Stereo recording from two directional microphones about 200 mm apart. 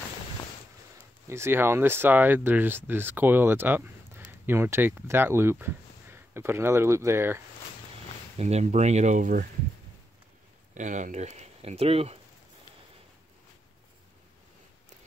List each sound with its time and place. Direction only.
1.2 s speech: 15° right (ahead or behind)
8.4 s speech: 30° right (ahead or behind)
10.7 s speech: 40° right (ahead or behind)